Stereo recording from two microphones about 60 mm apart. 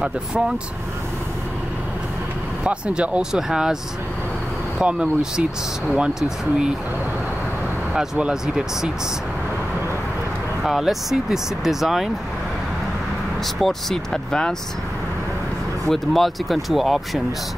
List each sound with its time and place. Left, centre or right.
0.0 s speech: centre
2.6 s speech: centre
4.7 s speech: centre
8.2 s speech: centre
10.6 s speech: centre
13.6 s speech: centre
15.9 s speech: centre